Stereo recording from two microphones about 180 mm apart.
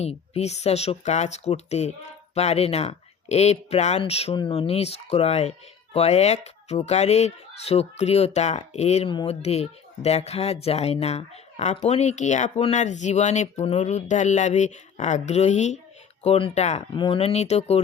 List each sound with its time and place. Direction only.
0.0 s speech: 35° left (ahead or behind)